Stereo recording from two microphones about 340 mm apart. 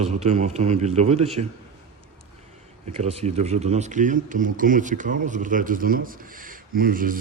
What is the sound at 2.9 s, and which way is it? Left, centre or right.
Speech, centre.